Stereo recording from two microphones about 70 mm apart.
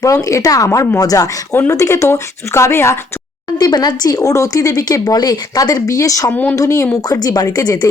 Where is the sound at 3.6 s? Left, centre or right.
Left.